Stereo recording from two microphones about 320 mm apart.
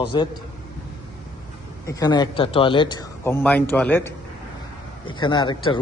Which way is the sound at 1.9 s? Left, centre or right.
Centre.